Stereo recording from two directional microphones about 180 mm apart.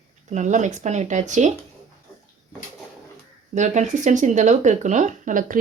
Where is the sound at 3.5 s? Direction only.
40° right (ahead or behind).